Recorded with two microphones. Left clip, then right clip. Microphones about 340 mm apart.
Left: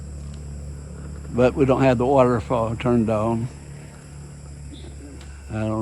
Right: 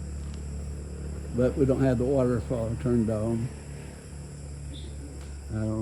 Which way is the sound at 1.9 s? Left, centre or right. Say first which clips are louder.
Left 8 dB; centre.